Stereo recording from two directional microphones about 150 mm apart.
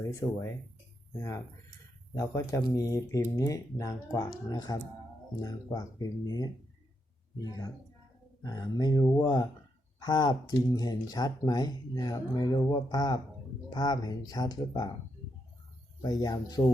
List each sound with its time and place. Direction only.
0.2 s speech: 30° left (ahead or behind)
2.1 s speech: 20° left (ahead or behind)
16.0 s speech: 25° left (ahead or behind)